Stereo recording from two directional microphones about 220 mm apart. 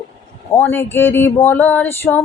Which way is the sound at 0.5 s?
10° left (ahead or behind).